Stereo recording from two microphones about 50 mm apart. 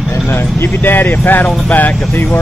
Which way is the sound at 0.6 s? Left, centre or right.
Left.